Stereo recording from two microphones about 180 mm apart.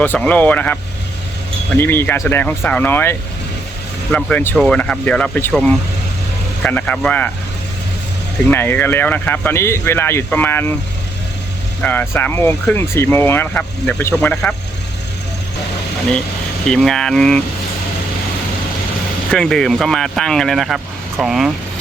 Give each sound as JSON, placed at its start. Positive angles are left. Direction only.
{"t": 0.0, "sound": "speech", "side_deg": 10}
{"t": 8.4, "sound": "speech", "side_deg": 10}
{"t": 11.8, "sound": "speech", "side_deg": 10}
{"t": 16.6, "sound": "speech", "side_deg": 5}
{"t": 19.3, "sound": "speech", "side_deg": 5}